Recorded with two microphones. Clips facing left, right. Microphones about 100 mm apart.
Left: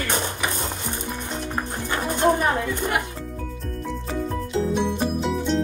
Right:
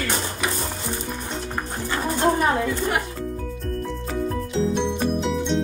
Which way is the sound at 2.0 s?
15° left (ahead or behind).